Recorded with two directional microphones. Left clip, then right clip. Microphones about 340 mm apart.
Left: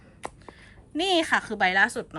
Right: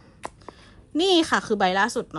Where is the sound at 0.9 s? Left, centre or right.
Centre.